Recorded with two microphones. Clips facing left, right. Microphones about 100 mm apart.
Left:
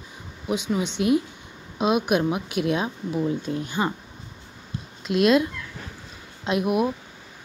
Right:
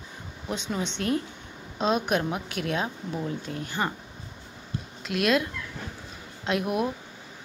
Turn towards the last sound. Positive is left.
turn(degrees=15)  # may be behind; listen again after turning